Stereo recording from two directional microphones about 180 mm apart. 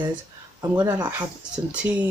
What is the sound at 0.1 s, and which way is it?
Speech, 15° right (ahead or behind).